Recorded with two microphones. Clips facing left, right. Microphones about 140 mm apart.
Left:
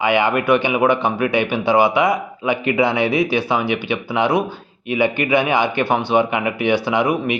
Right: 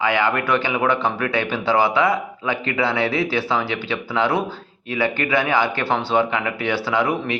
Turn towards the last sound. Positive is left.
turn(degrees=15)  # may be behind; listen again after turning